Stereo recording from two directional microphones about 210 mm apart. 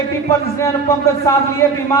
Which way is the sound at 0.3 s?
15° left (ahead or behind).